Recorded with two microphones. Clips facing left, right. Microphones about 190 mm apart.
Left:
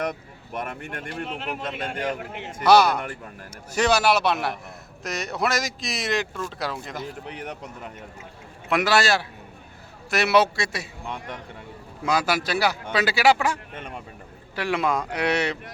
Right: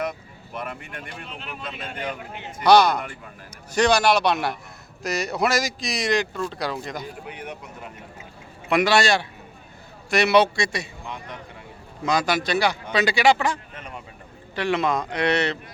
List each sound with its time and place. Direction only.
0.6 s speech: 45° left (ahead or behind)
1.3 s a man's voice: 75° left (ahead or behind)
2.6 s a man's voice: 5° left (ahead or behind)
8.7 s speech: centre (ahead or behind)
12.0 s a man's voice: 5° left (ahead or behind)